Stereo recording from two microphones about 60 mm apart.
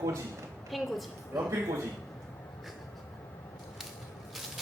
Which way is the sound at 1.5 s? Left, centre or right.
Right.